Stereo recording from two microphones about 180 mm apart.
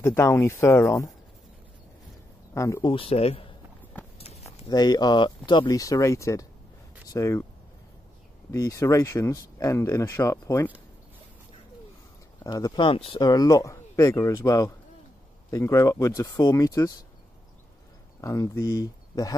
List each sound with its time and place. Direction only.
0.0 s speech: 15° left (ahead or behind)
2.5 s speech: 15° left (ahead or behind)
2.9 s speech: 30° left (ahead or behind)
4.6 s speech: 20° left (ahead or behind)
8.5 s speech: 20° left (ahead or behind)
12.4 s speech: 20° left (ahead or behind)
18.2 s speech: 15° left (ahead or behind)